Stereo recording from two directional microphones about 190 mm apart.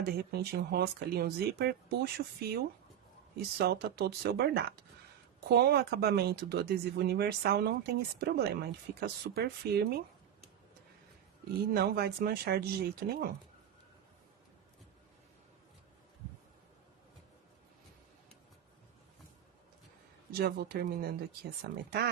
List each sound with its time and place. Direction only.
0.0 s speech: 55° right (ahead or behind)
11.7 s speech: 55° right (ahead or behind)
20.3 s speech: 55° right (ahead or behind)